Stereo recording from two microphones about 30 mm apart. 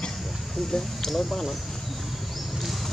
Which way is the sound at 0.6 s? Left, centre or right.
Centre.